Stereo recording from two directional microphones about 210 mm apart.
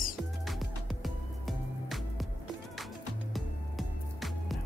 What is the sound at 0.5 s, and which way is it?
Music, centre (ahead or behind).